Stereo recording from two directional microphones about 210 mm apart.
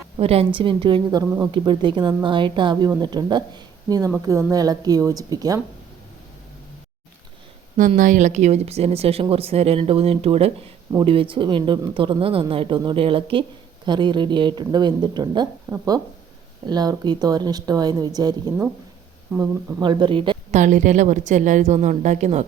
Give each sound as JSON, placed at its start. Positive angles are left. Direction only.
{"t": 0.2, "sound": "speech", "side_deg": -30}
{"t": 7.8, "sound": "speech", "side_deg": -40}
{"t": 15.7, "sound": "speech", "side_deg": -10}
{"t": 20.6, "sound": "a woman's voice", "side_deg": -35}